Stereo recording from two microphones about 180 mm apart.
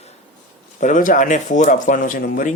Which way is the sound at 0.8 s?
45° left (ahead or behind).